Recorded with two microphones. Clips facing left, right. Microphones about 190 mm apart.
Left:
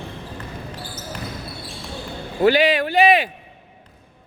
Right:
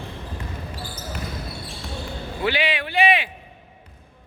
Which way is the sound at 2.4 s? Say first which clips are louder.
Left 9 dB; 40° left (ahead or behind).